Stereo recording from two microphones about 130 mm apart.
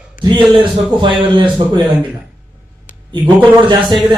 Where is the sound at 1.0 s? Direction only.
40° right (ahead or behind).